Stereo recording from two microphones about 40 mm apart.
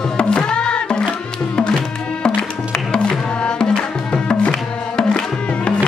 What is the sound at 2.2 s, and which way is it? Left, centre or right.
Music, centre.